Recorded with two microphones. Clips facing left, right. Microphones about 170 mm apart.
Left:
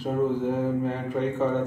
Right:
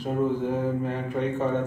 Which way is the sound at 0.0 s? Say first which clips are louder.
Left 1 dB; 5° left (ahead or behind).